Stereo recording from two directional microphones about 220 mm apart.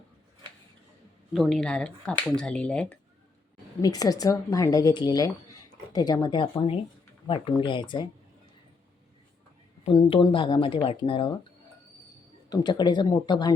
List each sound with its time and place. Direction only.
1.3 s speech: centre (ahead or behind)
3.8 s speech: 15° left (ahead or behind)
9.8 s speech: 25° left (ahead or behind)
12.5 s speech: 20° left (ahead or behind)